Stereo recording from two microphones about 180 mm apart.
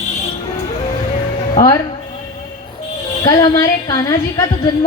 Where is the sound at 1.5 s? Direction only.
20° left (ahead or behind).